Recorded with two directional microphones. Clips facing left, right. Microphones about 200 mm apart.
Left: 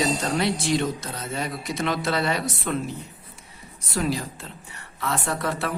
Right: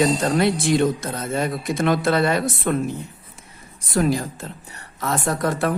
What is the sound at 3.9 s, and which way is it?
A woman's voice, 50° right (ahead or behind).